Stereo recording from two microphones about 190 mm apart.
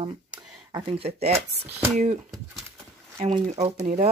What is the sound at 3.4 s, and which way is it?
Speech, 40° right (ahead or behind).